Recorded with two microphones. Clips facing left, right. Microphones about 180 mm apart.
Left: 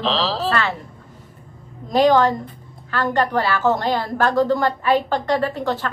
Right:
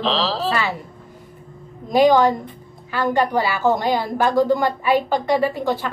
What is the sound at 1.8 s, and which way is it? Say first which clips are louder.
Speech: right 1 dB; centre (ahead or behind).